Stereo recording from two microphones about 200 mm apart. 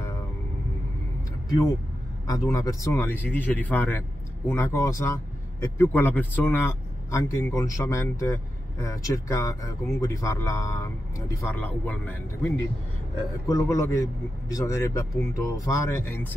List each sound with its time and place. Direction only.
2.2 s speech: 15° left (ahead or behind)